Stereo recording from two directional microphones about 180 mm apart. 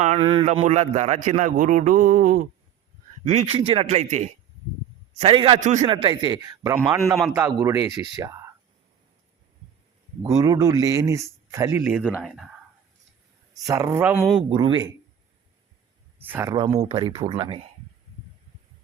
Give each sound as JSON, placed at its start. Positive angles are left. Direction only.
{"t": 0.0, "sound": "a man's voice", "side_deg": -35}
{"t": 5.2, "sound": "speech", "side_deg": -30}
{"t": 5.5, "sound": "speech", "side_deg": -40}
{"t": 5.9, "sound": "speech", "side_deg": -25}
{"t": 10.2, "sound": "speech", "side_deg": -20}
{"t": 13.7, "sound": "speech", "side_deg": -15}
{"t": 14.5, "sound": "speech", "side_deg": -25}
{"t": 16.2, "sound": "speech", "side_deg": -10}
{"t": 16.6, "sound": "speech", "side_deg": -30}